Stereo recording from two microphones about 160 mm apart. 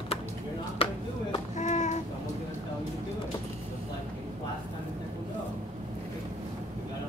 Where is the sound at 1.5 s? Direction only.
45° left (ahead or behind).